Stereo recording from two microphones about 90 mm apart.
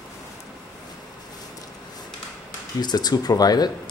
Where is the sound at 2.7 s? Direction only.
50° left (ahead or behind).